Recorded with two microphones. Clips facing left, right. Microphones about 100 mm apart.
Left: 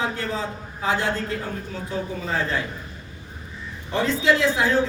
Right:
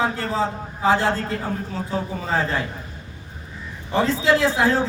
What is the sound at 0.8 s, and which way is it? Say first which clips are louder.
A man's voice: right 5 dB; 35° right (ahead or behind).